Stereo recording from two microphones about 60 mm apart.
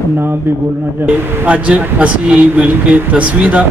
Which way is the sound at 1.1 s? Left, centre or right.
Right.